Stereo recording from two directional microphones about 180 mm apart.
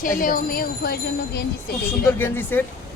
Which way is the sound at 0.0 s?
50° left (ahead or behind).